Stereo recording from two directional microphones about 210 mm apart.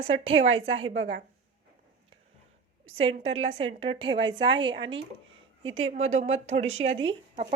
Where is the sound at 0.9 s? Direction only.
65° right (ahead or behind).